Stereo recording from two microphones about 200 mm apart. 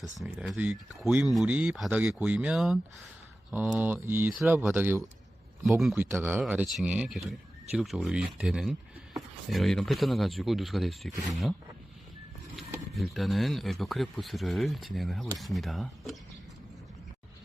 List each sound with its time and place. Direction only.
0.2 s speech: centre (ahead or behind)
12.5 s speech: centre (ahead or behind)